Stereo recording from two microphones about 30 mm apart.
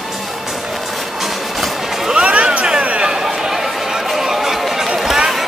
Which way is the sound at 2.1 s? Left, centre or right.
Right.